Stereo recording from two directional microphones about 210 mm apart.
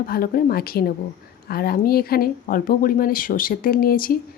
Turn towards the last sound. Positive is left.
turn(degrees=45)  # may be behind; listen again after turning